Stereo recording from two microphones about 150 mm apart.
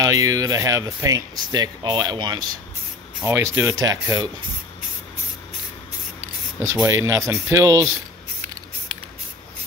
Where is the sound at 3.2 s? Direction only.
15° right (ahead or behind).